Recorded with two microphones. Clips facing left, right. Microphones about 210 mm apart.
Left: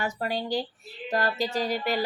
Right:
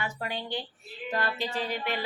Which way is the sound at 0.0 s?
40° left (ahead or behind).